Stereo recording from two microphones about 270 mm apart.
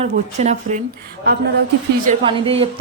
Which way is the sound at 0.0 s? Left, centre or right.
Right.